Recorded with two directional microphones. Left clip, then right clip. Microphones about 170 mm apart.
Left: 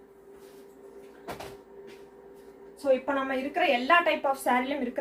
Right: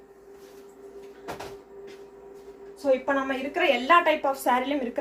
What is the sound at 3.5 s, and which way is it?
A woman's voice, 25° right (ahead or behind).